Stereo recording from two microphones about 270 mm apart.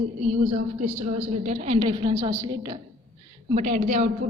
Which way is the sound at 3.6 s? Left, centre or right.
Right.